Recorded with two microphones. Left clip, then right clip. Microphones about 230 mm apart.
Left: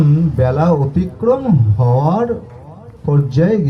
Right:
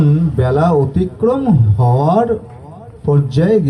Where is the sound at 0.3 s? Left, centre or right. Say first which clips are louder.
Right 2 dB; right.